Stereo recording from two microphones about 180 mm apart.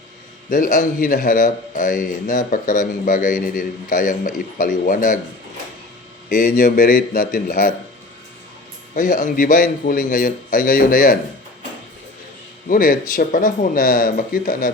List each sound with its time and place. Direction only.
0.5 s a man's voice: 50° left (ahead or behind)
6.2 s a man's voice: 50° left (ahead or behind)
9.0 s a man's voice: 45° left (ahead or behind)
12.6 s a man's voice: 50° left (ahead or behind)